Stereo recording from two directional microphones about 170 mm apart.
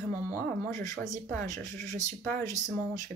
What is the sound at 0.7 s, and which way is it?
Speech, 20° left (ahead or behind).